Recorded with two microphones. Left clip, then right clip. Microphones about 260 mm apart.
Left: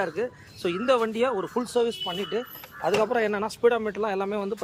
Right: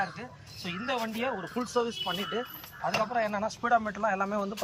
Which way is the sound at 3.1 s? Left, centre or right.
Left.